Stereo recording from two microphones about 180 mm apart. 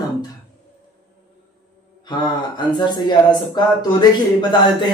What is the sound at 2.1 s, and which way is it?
Speech, 25° left (ahead or behind).